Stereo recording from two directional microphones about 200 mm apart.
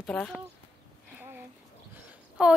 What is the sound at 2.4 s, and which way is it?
Speech, 5° right (ahead or behind).